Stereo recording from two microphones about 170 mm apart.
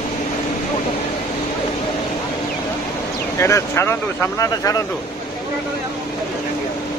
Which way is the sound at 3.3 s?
15° left (ahead or behind).